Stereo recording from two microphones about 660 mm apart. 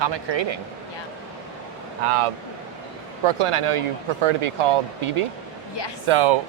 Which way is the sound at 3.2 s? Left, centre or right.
Right.